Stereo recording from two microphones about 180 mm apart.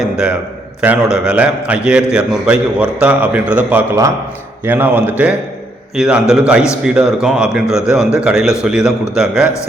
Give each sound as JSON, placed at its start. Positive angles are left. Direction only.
{"t": 0.0, "sound": "a man's voice", "side_deg": -5}